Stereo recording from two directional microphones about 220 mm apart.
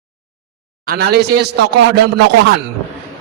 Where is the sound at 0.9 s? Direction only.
45° right (ahead or behind).